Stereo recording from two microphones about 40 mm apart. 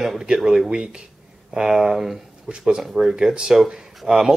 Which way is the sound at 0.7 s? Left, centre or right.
Right.